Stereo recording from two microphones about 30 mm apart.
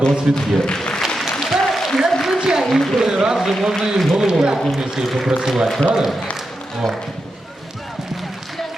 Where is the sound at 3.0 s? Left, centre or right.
Centre.